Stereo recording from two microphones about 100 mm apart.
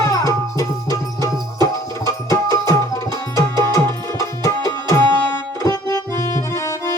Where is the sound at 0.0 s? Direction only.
35° left (ahead or behind).